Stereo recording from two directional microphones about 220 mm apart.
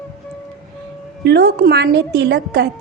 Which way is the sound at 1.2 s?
50° right (ahead or behind).